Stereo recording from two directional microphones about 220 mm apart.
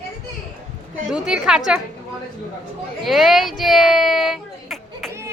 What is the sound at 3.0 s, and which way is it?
Speech, centre (ahead or behind).